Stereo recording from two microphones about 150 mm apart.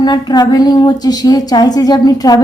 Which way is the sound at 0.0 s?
25° left (ahead or behind).